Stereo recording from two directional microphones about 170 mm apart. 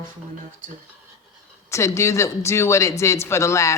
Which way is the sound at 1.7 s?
15° left (ahead or behind).